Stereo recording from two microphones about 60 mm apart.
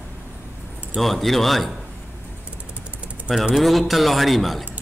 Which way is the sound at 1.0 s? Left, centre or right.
Centre.